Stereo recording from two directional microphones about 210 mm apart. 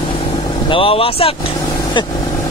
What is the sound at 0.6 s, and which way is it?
Speech, 25° left (ahead or behind).